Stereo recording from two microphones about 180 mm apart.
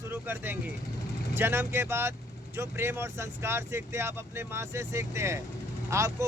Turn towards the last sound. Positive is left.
turn(degrees=-15)  # may be behind; listen again after turning